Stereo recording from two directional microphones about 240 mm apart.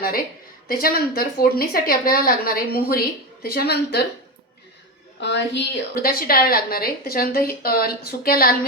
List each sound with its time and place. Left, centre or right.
0.7 s a woman's voice: left
5.2 s a woman's voice: left